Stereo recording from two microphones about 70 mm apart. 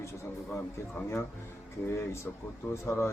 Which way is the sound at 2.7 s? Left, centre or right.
Left.